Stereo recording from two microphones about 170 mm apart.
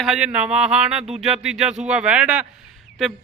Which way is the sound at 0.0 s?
5° right (ahead or behind).